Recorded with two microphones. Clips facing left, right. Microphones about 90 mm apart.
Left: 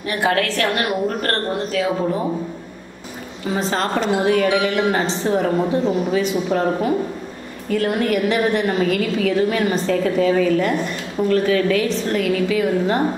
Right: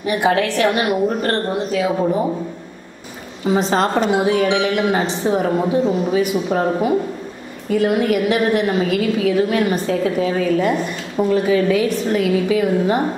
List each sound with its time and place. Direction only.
0.0 s a woman's voice: 20° right (ahead or behind)
3.4 s a woman's voice: 20° right (ahead or behind)